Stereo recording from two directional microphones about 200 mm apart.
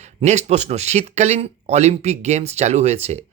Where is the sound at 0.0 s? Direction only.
35° right (ahead or behind).